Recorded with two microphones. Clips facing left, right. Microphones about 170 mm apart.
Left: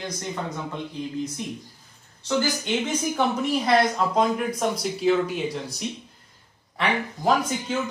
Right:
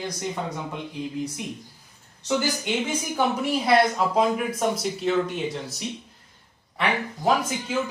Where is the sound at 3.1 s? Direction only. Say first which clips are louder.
Right 1 dB; 5° right (ahead or behind).